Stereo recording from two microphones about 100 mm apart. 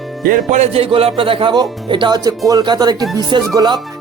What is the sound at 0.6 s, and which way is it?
Speech, 75° right (ahead or behind).